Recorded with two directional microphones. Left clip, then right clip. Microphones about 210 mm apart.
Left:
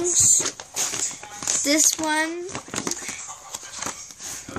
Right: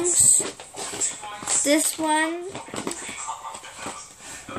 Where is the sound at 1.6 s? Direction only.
45° left (ahead or behind).